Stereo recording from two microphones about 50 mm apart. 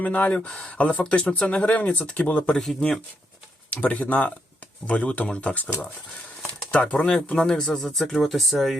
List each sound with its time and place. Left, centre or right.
0.0 s speech: left
2.6 s speech: centre
3.8 s speech: left
6.7 s speech: left
7.3 s speech: centre